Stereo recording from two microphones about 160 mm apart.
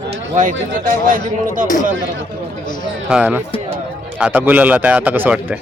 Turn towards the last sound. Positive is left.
turn(degrees=-10)  # may be behind; listen again after turning